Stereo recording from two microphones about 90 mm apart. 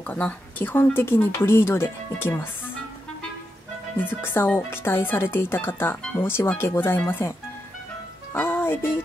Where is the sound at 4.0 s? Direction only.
25° left (ahead or behind).